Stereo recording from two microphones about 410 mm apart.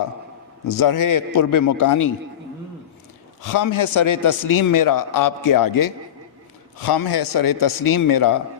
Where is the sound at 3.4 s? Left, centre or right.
Left.